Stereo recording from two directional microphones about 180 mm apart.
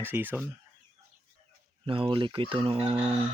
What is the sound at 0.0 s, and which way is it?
Speech, 10° right (ahead or behind).